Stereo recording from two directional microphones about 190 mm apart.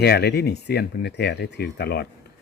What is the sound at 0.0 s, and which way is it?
Speech, 55° left (ahead or behind).